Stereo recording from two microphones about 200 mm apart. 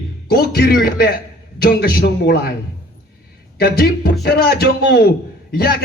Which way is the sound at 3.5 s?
55° left (ahead or behind).